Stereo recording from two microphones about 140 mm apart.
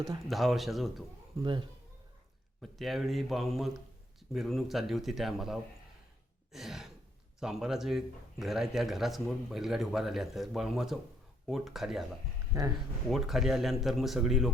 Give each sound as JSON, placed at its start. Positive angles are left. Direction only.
{"t": 0.3, "sound": "speech", "side_deg": 0}
{"t": 1.4, "sound": "speech", "side_deg": -35}
{"t": 2.6, "sound": "speech", "side_deg": 0}
{"t": 6.5, "sound": "sigh", "side_deg": 0}
{"t": 7.3, "sound": "speech", "side_deg": -5}
{"t": 13.1, "sound": "speech", "side_deg": 0}